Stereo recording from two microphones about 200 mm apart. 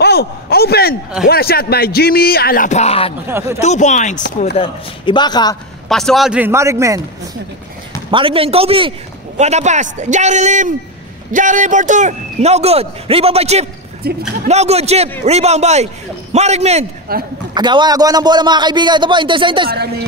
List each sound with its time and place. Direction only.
0.0 s a man's voice: 50° left (ahead or behind); by 3.2 s 30° left (ahead or behind)
3.3 s a man's voice: 10° right (ahead or behind)
3.6 s speech: 35° left (ahead or behind)
4.6 s a man's voice: 25° left (ahead or behind)
5.9 s a man's voice: centre (ahead or behind); by 7.0 s 15° right (ahead or behind)
8.1 s a man's voice: 25° right (ahead or behind)
14.0 s speech: 50° right (ahead or behind)
14.5 s a man's voice: 30° right (ahead or behind)
17.1 s speech: 50° right (ahead or behind)
17.6 s a man's voice: 20° right (ahead or behind)